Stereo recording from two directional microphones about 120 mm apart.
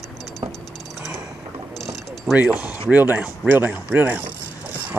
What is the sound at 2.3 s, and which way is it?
Speech, centre (ahead or behind).